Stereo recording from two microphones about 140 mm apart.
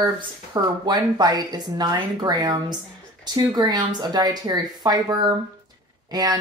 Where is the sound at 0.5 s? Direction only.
30° right (ahead or behind).